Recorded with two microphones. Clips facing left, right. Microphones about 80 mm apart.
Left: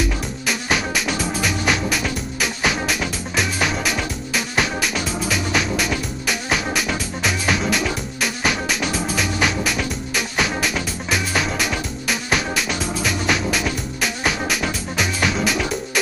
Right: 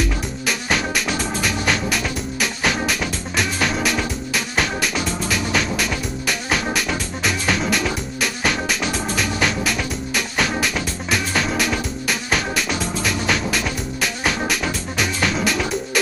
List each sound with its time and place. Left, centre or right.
0.5 s music: centre